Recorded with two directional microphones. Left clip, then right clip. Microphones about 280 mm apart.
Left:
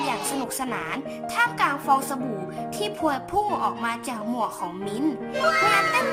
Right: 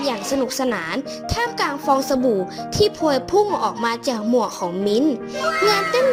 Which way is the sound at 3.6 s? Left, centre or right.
Centre.